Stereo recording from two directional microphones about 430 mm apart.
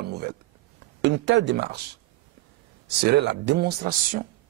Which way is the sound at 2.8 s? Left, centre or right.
Right.